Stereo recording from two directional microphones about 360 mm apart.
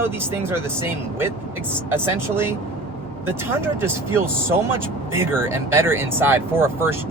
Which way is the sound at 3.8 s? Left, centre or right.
Centre.